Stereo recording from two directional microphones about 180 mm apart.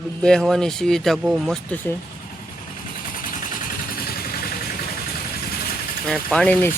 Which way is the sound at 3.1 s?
50° left (ahead or behind).